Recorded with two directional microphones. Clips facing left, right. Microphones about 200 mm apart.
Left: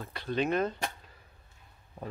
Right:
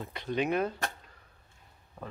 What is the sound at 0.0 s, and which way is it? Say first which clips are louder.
Speech: even; 20° right (ahead or behind).